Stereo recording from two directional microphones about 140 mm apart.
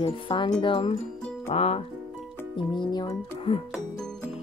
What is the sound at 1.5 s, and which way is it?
Speech, 50° left (ahead or behind).